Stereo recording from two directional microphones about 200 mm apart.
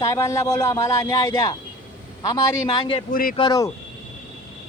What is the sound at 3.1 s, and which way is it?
Speech, 45° left (ahead or behind).